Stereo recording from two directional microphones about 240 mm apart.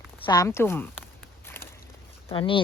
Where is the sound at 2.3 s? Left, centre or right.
Left.